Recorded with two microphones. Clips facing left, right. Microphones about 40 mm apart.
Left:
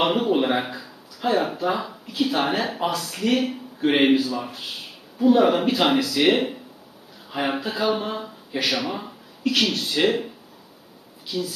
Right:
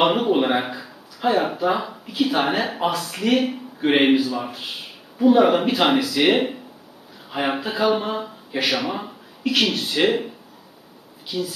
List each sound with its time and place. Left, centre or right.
0.0 s speech: centre